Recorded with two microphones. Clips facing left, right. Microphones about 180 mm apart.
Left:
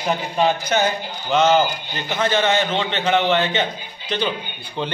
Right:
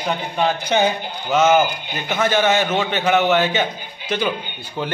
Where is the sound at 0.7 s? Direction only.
20° right (ahead or behind).